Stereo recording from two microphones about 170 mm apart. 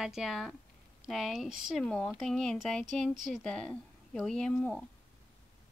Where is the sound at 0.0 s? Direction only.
Centre (ahead or behind).